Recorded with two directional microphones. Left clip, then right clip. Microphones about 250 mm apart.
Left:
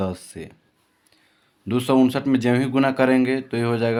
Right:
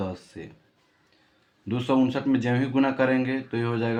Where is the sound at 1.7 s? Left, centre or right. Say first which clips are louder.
Left 5 dB; left.